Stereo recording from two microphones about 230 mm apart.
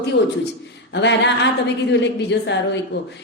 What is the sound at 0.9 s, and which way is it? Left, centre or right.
A woman's voice, left.